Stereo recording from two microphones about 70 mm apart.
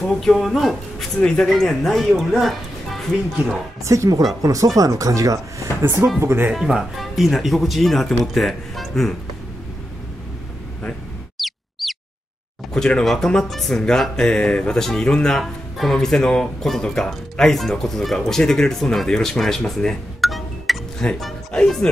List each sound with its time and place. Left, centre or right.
0.1 s speech: centre
3.8 s speech: right
5.8 s speech: right
6.5 s speech: centre
11.3 s a sound: centre
12.7 s speech: centre